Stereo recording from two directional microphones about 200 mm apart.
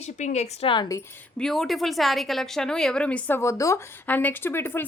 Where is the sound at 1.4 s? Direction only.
Centre (ahead or behind).